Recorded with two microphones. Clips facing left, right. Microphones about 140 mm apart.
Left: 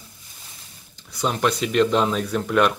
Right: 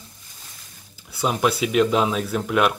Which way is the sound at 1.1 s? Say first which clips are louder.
Right 1 dB; 5° right (ahead or behind).